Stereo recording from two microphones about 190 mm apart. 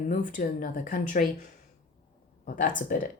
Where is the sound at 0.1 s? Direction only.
45° left (ahead or behind).